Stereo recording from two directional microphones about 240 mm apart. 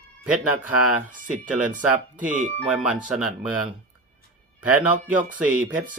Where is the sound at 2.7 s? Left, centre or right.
Centre.